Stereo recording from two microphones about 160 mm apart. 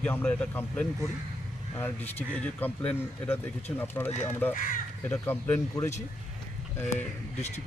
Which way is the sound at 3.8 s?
15° left (ahead or behind).